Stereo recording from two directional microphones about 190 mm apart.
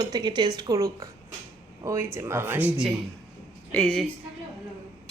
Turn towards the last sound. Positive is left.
turn(degrees=5)  # may be behind; listen again after turning